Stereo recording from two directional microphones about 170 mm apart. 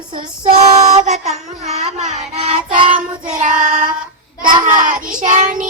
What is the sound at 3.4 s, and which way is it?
Child singing, 50° right (ahead or behind).